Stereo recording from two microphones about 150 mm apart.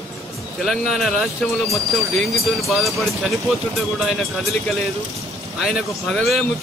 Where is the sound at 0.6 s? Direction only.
Centre (ahead or behind).